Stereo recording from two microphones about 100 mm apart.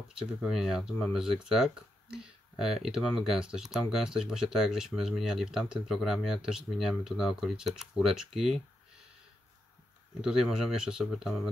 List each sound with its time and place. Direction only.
0.3 s speech: 5° right (ahead or behind)
10.2 s speech: 5° right (ahead or behind)